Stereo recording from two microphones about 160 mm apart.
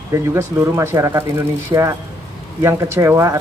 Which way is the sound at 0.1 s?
15° right (ahead or behind).